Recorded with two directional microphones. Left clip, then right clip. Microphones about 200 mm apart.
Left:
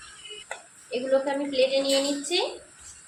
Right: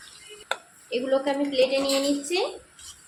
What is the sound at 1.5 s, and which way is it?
Speech, 30° right (ahead or behind).